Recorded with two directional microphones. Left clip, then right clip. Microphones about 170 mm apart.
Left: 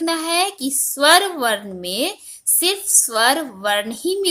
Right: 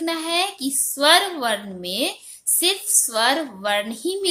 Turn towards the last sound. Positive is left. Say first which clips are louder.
# left 3 dB
turn(degrees=40)  # may be behind; listen again after turning